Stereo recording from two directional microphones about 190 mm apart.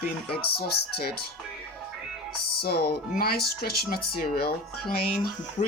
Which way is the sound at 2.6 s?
55° left (ahead or behind).